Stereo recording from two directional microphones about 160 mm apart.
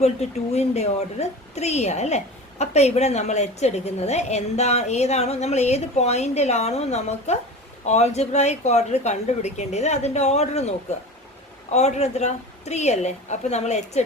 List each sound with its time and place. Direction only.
0.0 s a woman's voice: 40° left (ahead or behind)